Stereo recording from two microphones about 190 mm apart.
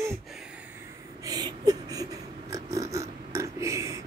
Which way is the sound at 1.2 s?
20° right (ahead or behind).